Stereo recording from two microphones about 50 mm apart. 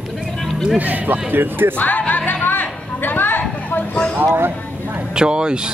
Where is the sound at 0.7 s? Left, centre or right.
Right.